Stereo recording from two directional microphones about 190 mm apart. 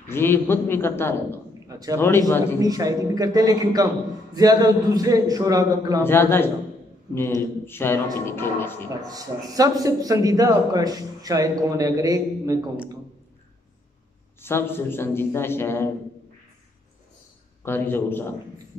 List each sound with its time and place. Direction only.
0.1 s speech: 10° left (ahead or behind)
1.7 s a man's voice: 20° right (ahead or behind)
2.0 s speech: 15° left (ahead or behind)
2.6 s a man's voice: 20° right (ahead or behind)
6.0 s speech: 10° left (ahead or behind)
7.6 s speech: 10° left (ahead or behind)
9.0 s a man's voice: 20° right (ahead or behind)
14.4 s speech: 10° left (ahead or behind)
17.6 s speech: 10° left (ahead or behind)